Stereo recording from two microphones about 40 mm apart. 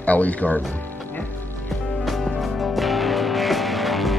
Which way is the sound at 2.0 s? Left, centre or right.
Centre.